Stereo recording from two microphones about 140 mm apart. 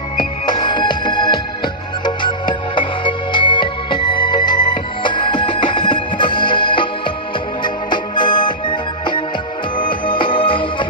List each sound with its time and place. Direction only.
0.2 s music: 35° left (ahead or behind)